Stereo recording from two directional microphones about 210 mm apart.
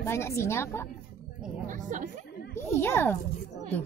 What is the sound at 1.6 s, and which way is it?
Speech, 35° right (ahead or behind).